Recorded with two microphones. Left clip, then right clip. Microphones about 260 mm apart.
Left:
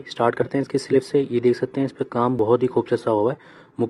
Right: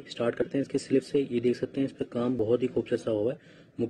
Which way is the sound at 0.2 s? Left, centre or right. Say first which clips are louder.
Left 8 dB; centre.